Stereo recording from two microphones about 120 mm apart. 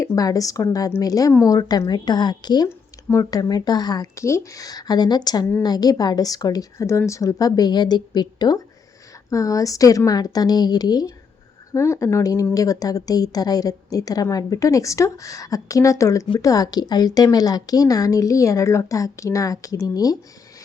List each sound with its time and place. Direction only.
0.0 s a woman's voice: 30° left (ahead or behind)
2.6 s a woman's voice: 25° left (ahead or behind)